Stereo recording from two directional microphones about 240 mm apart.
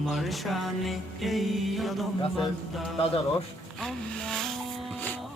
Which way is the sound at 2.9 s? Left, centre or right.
Left.